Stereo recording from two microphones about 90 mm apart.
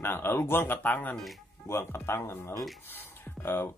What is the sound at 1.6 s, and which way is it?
Speech, 30° left (ahead or behind).